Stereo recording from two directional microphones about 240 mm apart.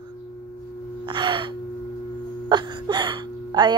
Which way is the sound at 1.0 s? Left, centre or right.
Centre.